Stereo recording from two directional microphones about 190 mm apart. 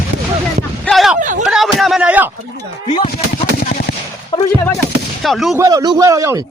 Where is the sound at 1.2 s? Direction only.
40° right (ahead or behind).